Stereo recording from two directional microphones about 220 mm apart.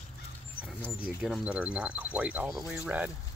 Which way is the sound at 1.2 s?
5° right (ahead or behind).